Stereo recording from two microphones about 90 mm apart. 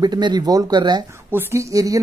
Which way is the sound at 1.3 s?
35° right (ahead or behind).